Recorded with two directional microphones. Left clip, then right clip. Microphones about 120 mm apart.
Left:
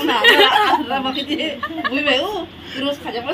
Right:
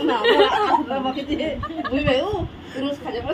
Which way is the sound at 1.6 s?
25° left (ahead or behind).